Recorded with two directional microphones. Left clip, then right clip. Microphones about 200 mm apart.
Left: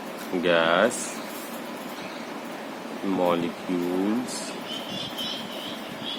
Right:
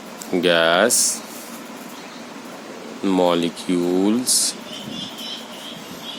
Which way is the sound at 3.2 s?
50° right (ahead or behind).